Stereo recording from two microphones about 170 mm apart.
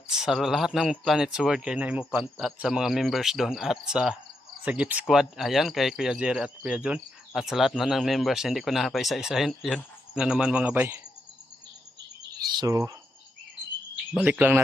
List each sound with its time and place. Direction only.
0.1 s speech: 5° right (ahead or behind)
12.4 s bird: 20° right (ahead or behind)
14.1 s speech: 5° right (ahead or behind)